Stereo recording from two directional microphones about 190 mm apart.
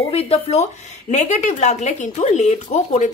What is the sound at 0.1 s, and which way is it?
Speech, 30° left (ahead or behind).